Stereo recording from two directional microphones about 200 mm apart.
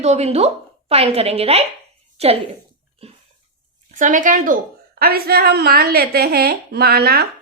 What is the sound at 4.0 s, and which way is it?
A woman's voice, 40° right (ahead or behind).